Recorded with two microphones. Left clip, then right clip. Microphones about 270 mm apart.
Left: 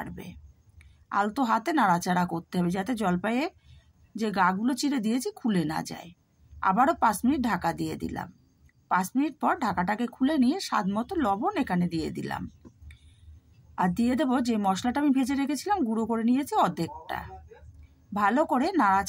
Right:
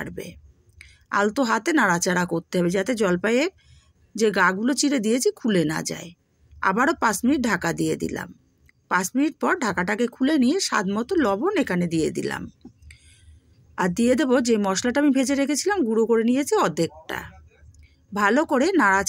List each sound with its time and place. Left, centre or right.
0.0 s a woman's voice: centre